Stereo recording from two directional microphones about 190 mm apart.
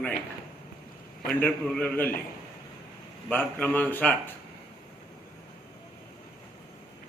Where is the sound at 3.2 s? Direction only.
10° left (ahead or behind).